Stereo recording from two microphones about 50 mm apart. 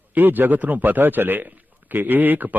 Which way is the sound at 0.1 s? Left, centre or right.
Right.